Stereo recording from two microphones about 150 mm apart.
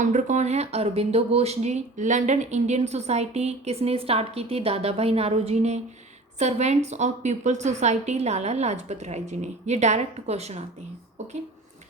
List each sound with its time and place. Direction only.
0.0 s speech: 55° right (ahead or behind)